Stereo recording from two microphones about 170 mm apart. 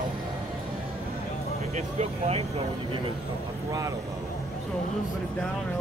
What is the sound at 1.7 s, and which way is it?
Speech, 40° right (ahead or behind).